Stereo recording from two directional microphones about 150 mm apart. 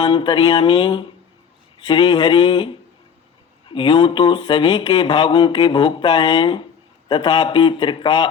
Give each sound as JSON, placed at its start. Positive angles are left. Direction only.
{"t": 0.0, "sound": "speech", "side_deg": 35}